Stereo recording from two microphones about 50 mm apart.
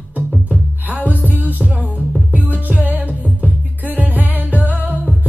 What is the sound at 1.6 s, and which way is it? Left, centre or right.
Music, right.